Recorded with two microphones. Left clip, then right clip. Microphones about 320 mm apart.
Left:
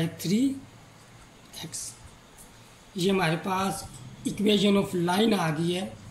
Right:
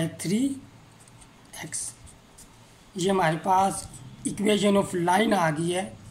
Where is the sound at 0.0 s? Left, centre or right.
Right.